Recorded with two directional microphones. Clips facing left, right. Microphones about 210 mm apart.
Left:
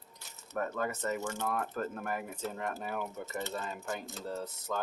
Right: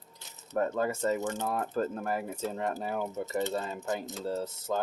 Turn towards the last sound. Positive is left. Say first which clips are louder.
# right 5 dB
turn(degrees=-25)  # may be behind; listen again after turning